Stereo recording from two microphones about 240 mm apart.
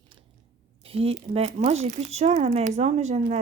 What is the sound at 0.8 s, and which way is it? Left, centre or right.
Speech, right.